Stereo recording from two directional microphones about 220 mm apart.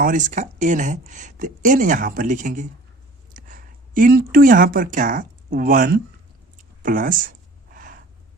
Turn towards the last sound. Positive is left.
turn(degrees=-35)  # may be behind; listen again after turning